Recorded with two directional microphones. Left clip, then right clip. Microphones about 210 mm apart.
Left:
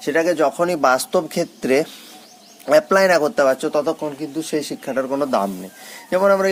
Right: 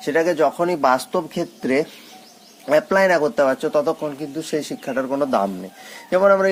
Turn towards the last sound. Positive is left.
turn(degrees=5)  # may be behind; listen again after turning